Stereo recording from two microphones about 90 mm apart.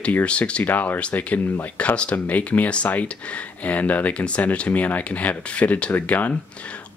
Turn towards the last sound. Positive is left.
turn(degrees=15)  # may be behind; listen again after turning